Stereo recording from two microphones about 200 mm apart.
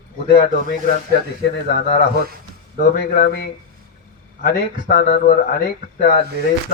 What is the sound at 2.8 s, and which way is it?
A man's voice, 55° left (ahead or behind).